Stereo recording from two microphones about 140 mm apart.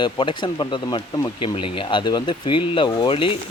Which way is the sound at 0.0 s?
35° left (ahead or behind).